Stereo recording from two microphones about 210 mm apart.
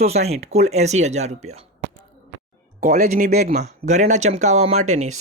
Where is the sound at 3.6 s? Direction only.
35° right (ahead or behind).